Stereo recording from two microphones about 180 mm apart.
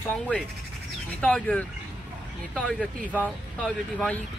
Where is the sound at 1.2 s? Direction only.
5° left (ahead or behind).